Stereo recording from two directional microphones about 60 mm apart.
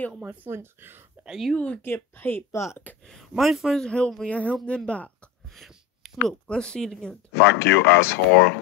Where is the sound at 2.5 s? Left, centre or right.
Left.